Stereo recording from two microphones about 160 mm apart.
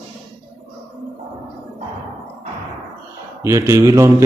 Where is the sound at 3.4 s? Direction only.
20° right (ahead or behind).